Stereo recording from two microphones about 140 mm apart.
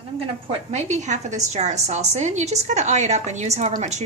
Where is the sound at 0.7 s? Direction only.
55° right (ahead or behind).